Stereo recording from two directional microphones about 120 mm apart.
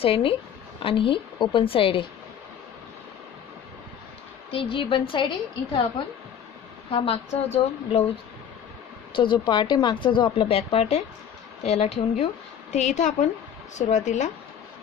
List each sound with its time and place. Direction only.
0.0 s a woman's voice: 50° left (ahead or behind)
4.5 s a woman's voice: 50° left (ahead or behind)
7.0 s a woman's voice: 60° left (ahead or behind)
9.1 s a woman's voice: 40° left (ahead or behind); by 12.3 s 70° left (ahead or behind)
12.7 s a woman's voice: 85° left